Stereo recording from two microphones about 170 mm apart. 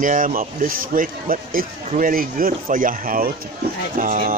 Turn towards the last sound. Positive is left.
turn(degrees=-50)  # may be behind; listen again after turning